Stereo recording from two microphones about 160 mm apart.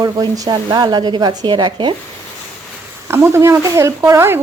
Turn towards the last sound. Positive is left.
turn(degrees=-15)  # may be behind; listen again after turning